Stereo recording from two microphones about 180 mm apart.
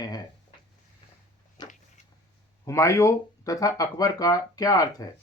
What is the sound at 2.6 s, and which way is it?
Speech, 15° left (ahead or behind).